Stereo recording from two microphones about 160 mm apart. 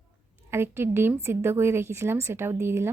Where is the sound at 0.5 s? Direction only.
15° right (ahead or behind).